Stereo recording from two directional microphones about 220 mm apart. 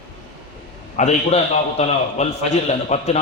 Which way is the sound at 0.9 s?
30° left (ahead or behind).